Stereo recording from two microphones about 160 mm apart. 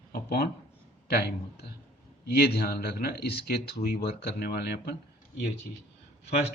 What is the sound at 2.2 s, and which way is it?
Speech, 85° left.